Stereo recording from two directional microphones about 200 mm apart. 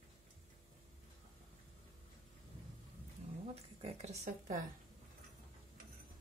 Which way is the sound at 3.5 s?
30° right (ahead or behind).